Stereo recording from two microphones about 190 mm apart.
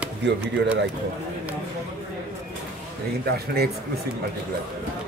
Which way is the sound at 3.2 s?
55° right (ahead or behind).